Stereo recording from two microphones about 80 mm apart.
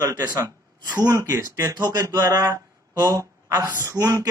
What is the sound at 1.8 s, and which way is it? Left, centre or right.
Speech, right.